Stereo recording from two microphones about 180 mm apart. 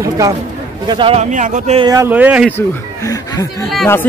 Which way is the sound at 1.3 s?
45° right (ahead or behind).